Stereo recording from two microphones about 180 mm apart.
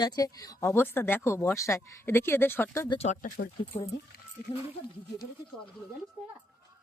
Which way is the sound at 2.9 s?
35° left (ahead or behind).